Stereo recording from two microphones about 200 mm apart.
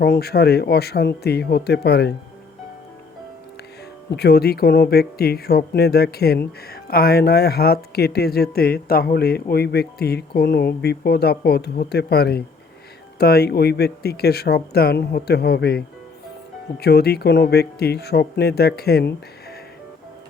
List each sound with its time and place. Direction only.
0.0 s speech: 55° left (ahead or behind)
4.1 s speech: 55° left (ahead or behind)